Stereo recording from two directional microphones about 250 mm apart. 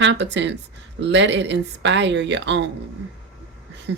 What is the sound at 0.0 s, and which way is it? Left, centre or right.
Speech, right.